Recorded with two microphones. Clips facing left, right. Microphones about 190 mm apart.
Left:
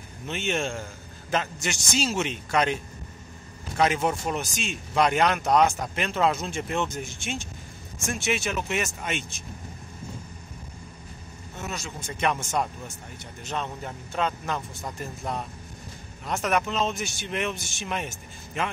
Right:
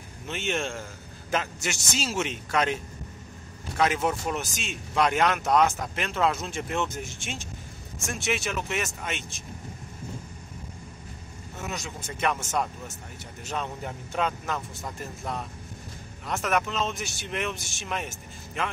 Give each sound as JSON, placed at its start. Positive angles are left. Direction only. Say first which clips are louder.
{"t": 0.3, "sound": "speech", "louder": "left 2 dB", "side_deg": 0}
{"t": 11.6, "sound": "speech", "louder": "even", "side_deg": -15}
{"t": 12.2, "sound": "speech", "louder": "left 1 dB", "side_deg": 0}
{"t": 13.5, "sound": "a man's voice", "louder": "even", "side_deg": -10}
{"t": 16.3, "sound": "speech", "louder": "left 1 dB", "side_deg": 0}